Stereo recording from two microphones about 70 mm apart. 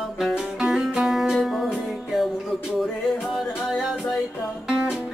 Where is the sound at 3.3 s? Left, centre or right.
Centre.